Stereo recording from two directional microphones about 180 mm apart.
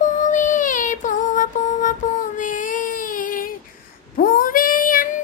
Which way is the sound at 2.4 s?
45° left (ahead or behind).